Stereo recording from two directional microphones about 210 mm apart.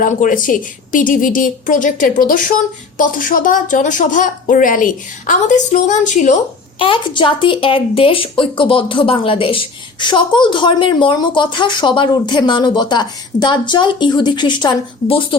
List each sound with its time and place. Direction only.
0.0 s a woman's voice: 40° left (ahead or behind)
6.7 s speech: 25° left (ahead or behind)